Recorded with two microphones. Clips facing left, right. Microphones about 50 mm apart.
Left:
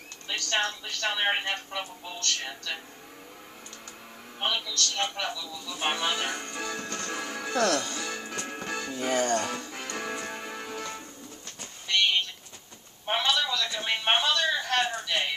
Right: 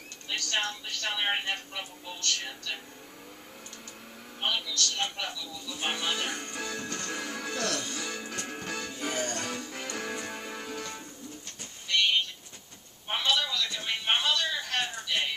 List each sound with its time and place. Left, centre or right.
0.5 s speech: left
4.6 s speech: left
6.1 s music: centre
7.5 s speech: left
8.0 s music: centre
9.1 s speech: left
9.4 s music: centre
13.0 s a sound: left